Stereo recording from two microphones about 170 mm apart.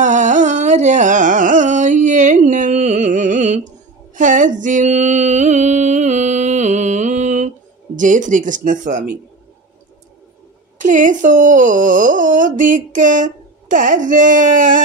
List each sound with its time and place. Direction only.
0.0 s carnatic music: 45° right (ahead or behind)
4.1 s music: 50° right (ahead or behind)
10.8 s speech: 50° right (ahead or behind)